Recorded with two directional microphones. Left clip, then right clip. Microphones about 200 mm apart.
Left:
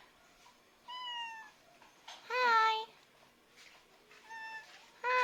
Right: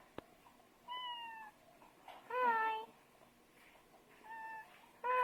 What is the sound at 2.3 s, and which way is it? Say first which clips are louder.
Child singing: left 6 dB; 15° left (ahead or behind).